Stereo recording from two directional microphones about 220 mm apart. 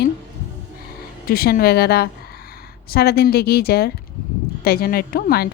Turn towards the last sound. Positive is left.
turn(degrees=45)  # may be behind; listen again after turning